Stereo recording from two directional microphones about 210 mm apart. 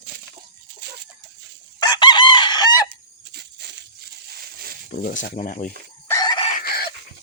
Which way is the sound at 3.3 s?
50° right (ahead or behind).